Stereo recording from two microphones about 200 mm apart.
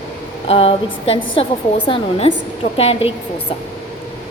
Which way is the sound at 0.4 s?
30° left (ahead or behind).